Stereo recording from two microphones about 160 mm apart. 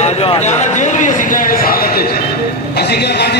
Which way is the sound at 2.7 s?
90° left.